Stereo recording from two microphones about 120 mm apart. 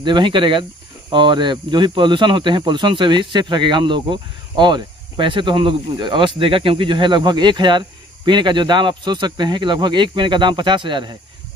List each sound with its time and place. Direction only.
0.0 s speech: 40° right (ahead or behind)